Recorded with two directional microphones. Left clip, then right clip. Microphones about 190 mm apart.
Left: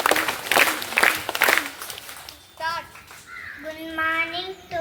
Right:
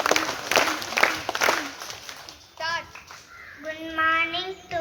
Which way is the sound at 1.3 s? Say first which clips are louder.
Left 3 dB; 60° right (ahead or behind).